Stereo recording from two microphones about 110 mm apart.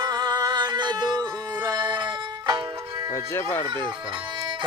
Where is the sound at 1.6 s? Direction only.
45° right (ahead or behind).